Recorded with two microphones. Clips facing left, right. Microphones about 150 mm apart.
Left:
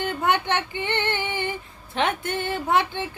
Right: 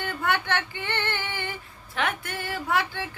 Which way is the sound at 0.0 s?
20° left (ahead or behind).